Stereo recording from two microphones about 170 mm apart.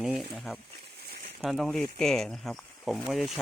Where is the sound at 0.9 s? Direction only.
70° right (ahead or behind).